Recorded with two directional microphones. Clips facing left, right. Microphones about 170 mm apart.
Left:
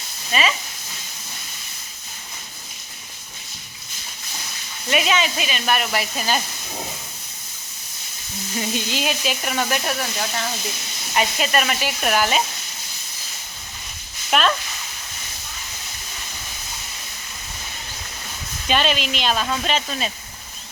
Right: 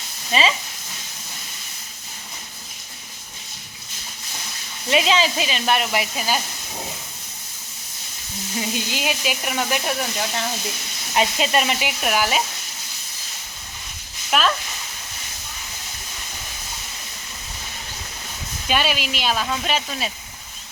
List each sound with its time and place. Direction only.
0.3 s speech: 25° right (ahead or behind)
4.9 s speech: 25° right (ahead or behind); by 6.4 s 10° right (ahead or behind)
8.5 s speech: 10° right (ahead or behind)
11.1 s speech: 20° right (ahead or behind); by 12.4 s 5° right (ahead or behind)
14.3 s speech: centre (ahead or behind)
18.7 s speech: 10° right (ahead or behind)